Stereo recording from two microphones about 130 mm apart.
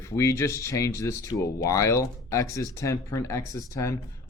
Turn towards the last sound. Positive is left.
turn(degrees=25)  # may be behind; listen again after turning